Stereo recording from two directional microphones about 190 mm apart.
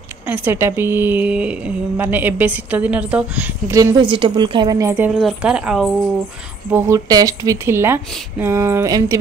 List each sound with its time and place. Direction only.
0.3 s a woman's voice: 10° right (ahead or behind)
6.7 s a woman's voice: 15° right (ahead or behind)